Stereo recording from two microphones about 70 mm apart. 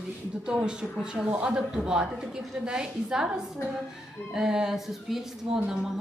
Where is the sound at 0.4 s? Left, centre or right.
Centre.